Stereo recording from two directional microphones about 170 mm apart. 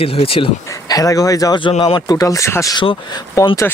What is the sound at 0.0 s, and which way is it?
Speech, 35° left (ahead or behind).